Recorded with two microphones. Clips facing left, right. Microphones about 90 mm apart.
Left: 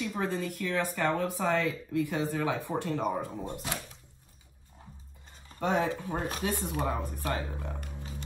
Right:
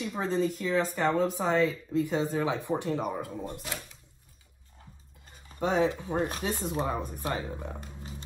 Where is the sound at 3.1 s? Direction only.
Centre (ahead or behind).